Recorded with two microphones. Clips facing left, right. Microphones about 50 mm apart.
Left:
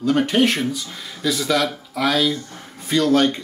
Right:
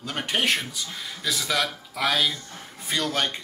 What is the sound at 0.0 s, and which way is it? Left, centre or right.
A man's voice, centre.